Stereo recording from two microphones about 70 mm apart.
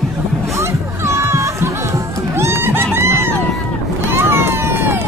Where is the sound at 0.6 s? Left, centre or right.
Right.